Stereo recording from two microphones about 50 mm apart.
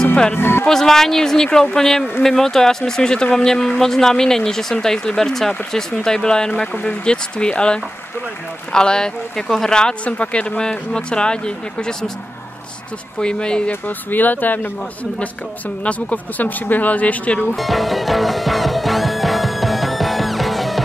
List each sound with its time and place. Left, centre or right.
0.4 s speech: left
0.7 s speech: centre
10.0 s speech: left
13.2 s speech: centre
13.7 s speech: left
15.8 s speech: left
17.6 s music: centre